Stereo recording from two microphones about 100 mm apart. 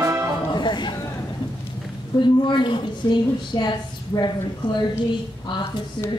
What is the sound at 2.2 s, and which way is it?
A woman's voice, 50° left (ahead or behind).